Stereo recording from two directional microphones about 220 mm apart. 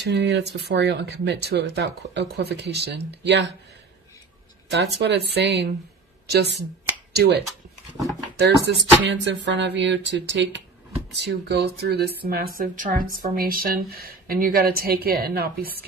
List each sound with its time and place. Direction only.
0.0 s speech: 50° right (ahead or behind)
4.7 s speech: 50° right (ahead or behind)
8.4 s speech: 50° right (ahead or behind)